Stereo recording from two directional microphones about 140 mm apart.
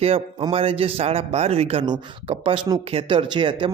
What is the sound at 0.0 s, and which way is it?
A man's voice, 45° right (ahead or behind).